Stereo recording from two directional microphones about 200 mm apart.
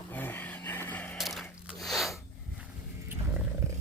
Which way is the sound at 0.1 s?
10° left (ahead or behind).